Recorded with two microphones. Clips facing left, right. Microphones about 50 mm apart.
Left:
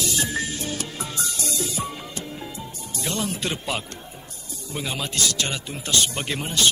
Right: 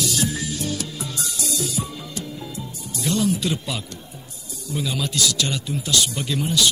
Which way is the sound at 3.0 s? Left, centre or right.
Left.